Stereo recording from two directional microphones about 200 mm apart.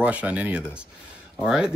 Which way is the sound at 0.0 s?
5° right (ahead or behind).